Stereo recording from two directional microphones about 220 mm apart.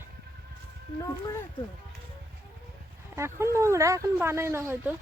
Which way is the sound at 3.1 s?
10° right (ahead or behind).